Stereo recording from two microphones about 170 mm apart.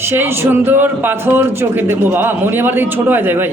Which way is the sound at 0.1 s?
15° right (ahead or behind).